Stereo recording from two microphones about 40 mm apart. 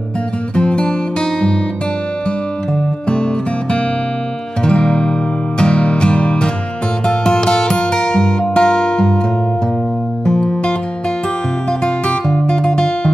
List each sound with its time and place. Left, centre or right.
0.6 s music: left
3.1 s music: left
10.2 s music: centre
11.8 s music: left